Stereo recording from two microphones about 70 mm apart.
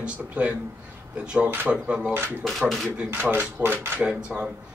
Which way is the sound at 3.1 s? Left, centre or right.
Right.